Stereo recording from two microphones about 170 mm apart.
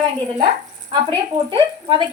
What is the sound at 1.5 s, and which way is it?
Speech, 30° right (ahead or behind).